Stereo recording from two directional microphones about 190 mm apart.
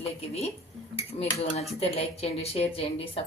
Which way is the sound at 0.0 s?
30° left (ahead or behind).